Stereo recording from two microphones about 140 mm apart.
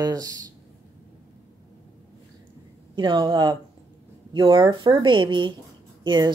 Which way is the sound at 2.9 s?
35° right (ahead or behind).